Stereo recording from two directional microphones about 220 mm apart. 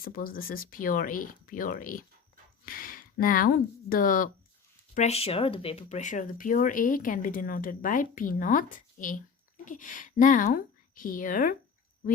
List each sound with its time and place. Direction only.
0.0 s speech: 40° left (ahead or behind)
4.9 s a woman's voice: 30° left (ahead or behind)